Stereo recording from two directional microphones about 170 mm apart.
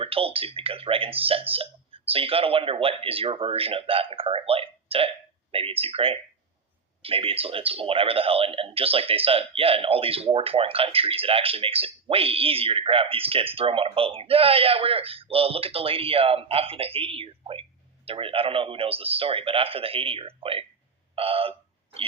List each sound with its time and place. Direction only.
0.0 s a man's voice: 35° right (ahead or behind)